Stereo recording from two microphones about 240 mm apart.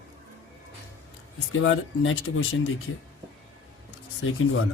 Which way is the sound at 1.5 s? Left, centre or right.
Left.